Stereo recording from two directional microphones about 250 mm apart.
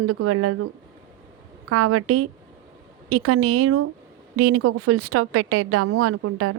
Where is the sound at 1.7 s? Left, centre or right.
Right.